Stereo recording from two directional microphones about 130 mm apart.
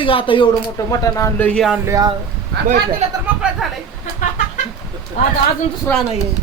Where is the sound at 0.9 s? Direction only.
25° left (ahead or behind).